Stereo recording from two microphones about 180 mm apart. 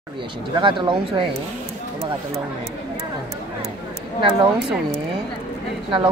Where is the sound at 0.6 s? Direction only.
25° right (ahead or behind).